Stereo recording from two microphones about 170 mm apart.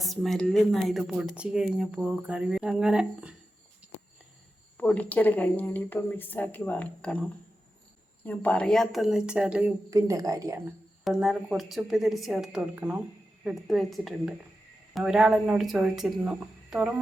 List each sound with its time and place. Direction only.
0.0 s speech: centre (ahead or behind)
4.8 s speech: 10° left (ahead or behind)
8.2 s speech: 10° left (ahead or behind); by 9.7 s 5° right (ahead or behind)
9.9 s speech: 20° right (ahead or behind)
11.0 s speech: centre (ahead or behind)